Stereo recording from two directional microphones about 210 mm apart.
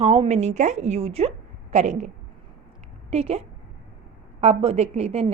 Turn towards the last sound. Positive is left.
turn(degrees=-30)  # may be behind; listen again after turning